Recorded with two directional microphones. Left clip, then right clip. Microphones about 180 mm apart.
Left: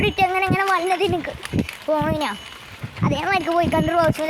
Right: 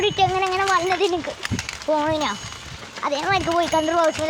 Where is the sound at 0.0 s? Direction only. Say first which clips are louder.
Even; 15° left (ahead or behind).